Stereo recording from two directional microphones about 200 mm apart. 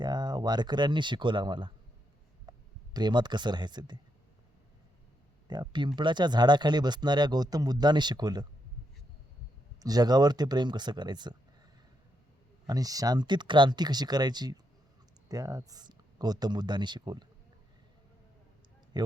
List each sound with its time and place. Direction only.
0.0 s speech: 20° right (ahead or behind)
5.5 s speech: 20° right (ahead or behind)
9.8 s speech: 20° right (ahead or behind)
12.6 s speech: 20° right (ahead or behind)
18.9 s speech: 20° right (ahead or behind)